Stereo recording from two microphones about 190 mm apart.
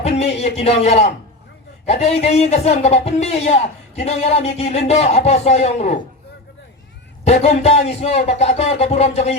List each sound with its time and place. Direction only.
0.0 s a man's voice: 35° left (ahead or behind)
7.3 s a man's voice: 35° left (ahead or behind)